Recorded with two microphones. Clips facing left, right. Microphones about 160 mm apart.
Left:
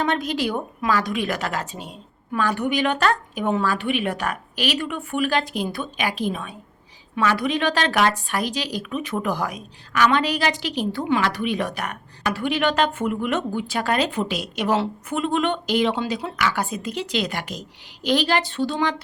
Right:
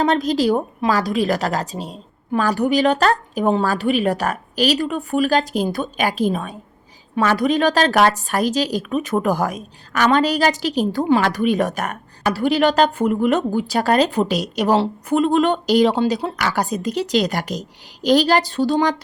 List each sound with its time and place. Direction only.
0.0 s a woman's voice: 35° right (ahead or behind)